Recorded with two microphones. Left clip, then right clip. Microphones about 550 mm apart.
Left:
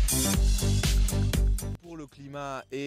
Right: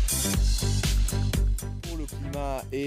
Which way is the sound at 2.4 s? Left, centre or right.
Left.